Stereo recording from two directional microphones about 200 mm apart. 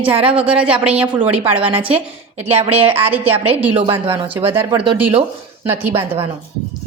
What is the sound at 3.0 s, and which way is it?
Speech, 10° right (ahead or behind).